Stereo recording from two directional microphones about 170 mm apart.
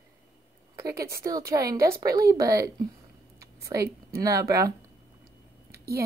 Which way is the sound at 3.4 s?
20° right (ahead or behind).